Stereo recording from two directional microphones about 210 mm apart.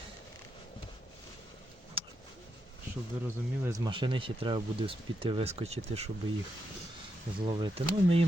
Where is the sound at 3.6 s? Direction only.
15° right (ahead or behind).